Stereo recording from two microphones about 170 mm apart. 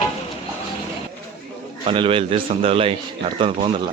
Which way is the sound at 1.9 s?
30° right (ahead or behind).